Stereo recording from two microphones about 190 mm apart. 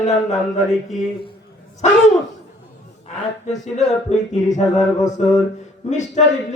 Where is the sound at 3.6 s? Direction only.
35° left (ahead or behind).